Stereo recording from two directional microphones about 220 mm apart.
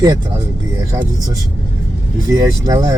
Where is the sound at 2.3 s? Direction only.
15° right (ahead or behind).